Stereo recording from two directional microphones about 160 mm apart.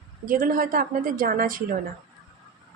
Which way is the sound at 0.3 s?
60° right (ahead or behind).